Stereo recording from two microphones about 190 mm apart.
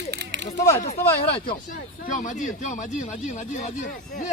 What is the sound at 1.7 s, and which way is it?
Speech, 45° left (ahead or behind).